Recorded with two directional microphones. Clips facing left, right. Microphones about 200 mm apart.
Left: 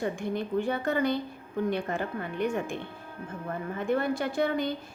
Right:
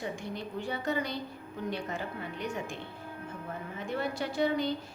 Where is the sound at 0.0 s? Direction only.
55° left (ahead or behind).